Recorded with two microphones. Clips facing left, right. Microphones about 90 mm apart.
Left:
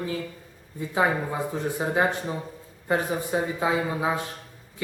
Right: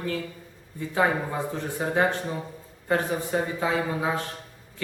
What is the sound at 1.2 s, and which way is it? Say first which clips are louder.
Speech: left 2 dB; 10° left (ahead or behind).